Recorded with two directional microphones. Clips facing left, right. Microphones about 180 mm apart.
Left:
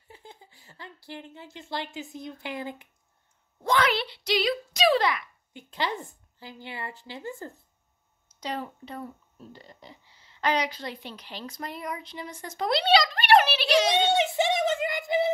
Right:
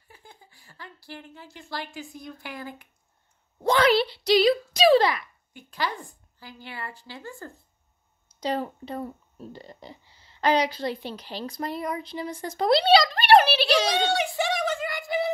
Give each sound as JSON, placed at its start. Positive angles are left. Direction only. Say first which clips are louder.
{"t": 0.1, "sound": "speech", "louder": "left 3 dB", "side_deg": 20}
{"t": 3.6, "sound": "speech", "louder": "right 5 dB", "side_deg": -35}
{"t": 5.5, "sound": "a woman's voice", "louder": "even", "side_deg": 20}
{"t": 8.3, "sound": "speech", "louder": "right 6 dB", "side_deg": -30}
{"t": 13.8, "sound": "a sound", "louder": "left 1 dB", "side_deg": 20}